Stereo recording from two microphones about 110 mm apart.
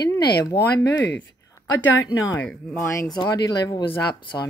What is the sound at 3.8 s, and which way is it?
Speech, 50° left (ahead or behind).